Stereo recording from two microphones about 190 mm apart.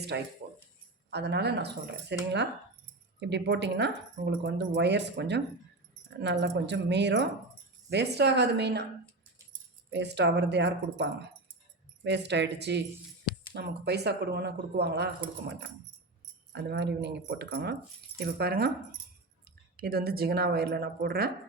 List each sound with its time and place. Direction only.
0.1 s speech: 65° right (ahead or behind)
9.9 s speech: 65° right (ahead or behind)
16.5 s speech: 60° right (ahead or behind)
19.7 s speech: 55° right (ahead or behind)